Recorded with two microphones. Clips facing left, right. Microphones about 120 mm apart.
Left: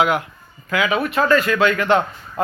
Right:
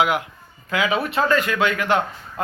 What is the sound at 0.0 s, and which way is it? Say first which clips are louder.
Speech: left 2 dB; 15° right (ahead or behind).